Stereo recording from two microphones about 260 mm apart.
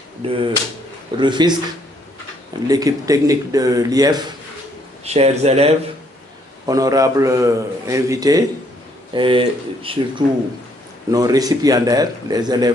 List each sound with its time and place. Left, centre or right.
0.2 s a man's voice: right
2.6 s a man's voice: centre
6.7 s a man's voice: centre